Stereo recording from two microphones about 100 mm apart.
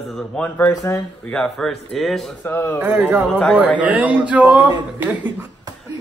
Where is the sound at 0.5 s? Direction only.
20° left (ahead or behind).